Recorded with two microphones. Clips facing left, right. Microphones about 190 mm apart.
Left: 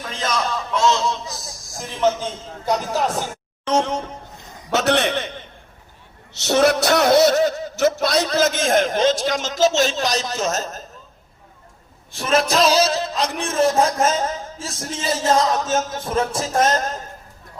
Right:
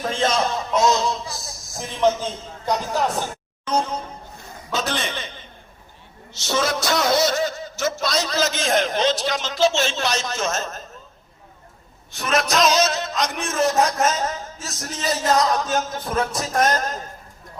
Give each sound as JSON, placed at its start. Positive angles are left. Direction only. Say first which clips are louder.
{"t": 0.0, "sound": "a sound", "louder": "right 3 dB", "side_deg": -30}
{"t": 2.6, "sound": "speech", "louder": "left 1 dB", "side_deg": 10}
{"t": 3.6, "sound": "music", "louder": "left 3 dB", "side_deg": 85}
{"t": 4.7, "sound": "a sound", "louder": "left 7 dB", "side_deg": 70}
{"t": 6.3, "sound": "a man's voice", "louder": "left 7 dB", "side_deg": 65}
{"t": 12.1, "sound": "a man's voice", "louder": "left 3 dB", "side_deg": 30}